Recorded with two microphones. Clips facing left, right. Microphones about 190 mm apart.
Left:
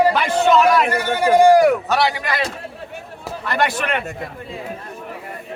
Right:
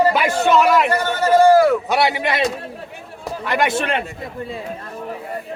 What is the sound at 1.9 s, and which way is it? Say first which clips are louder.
Speech: right 1 dB; 20° right (ahead or behind).